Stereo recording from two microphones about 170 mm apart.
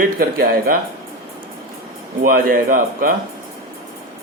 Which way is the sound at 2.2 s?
60° right (ahead or behind).